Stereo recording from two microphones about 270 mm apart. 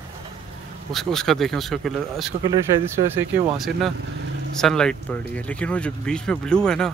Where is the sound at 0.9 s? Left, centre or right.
Centre.